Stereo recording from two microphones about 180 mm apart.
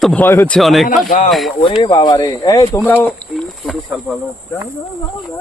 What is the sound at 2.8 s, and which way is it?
Speech, 10° left (ahead or behind).